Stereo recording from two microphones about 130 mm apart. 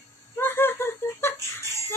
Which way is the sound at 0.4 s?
15° left (ahead or behind).